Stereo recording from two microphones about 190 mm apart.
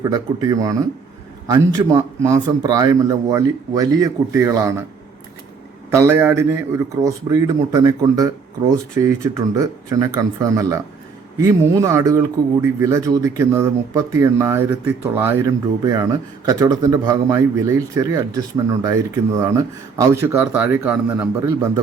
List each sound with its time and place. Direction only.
0.0 s speech: 20° right (ahead or behind)
5.9 s speech: 15° right (ahead or behind)